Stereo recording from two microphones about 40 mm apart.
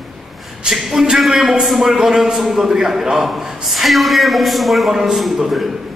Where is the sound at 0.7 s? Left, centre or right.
Centre.